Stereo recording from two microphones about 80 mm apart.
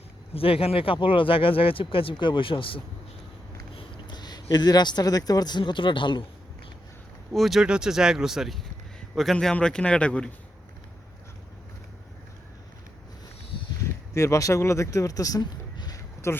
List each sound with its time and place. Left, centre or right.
0.9 s speech: left
7.3 s a man's voice: centre
14.1 s speech: left
16.3 s speech: left